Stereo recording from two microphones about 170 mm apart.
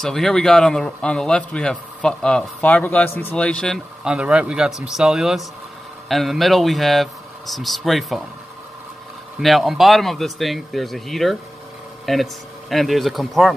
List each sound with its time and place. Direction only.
0.0 s a man's voice: 5° left (ahead or behind)
9.4 s a man's voice: centre (ahead or behind)